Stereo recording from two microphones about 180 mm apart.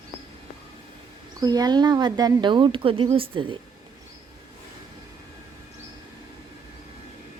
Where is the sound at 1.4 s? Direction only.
20° right (ahead or behind).